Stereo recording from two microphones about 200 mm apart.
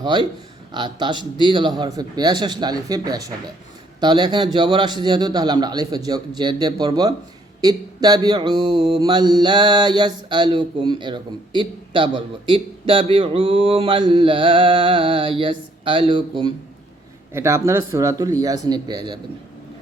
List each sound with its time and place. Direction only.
0.0 s mantra: 20° right (ahead or behind)
17.3 s speech: 15° right (ahead or behind)